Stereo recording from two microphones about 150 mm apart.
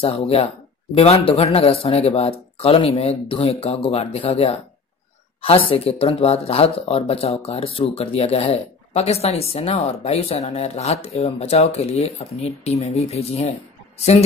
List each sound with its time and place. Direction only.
0.0 s speech: 40° left (ahead or behind)
5.7 s speech: 40° left (ahead or behind)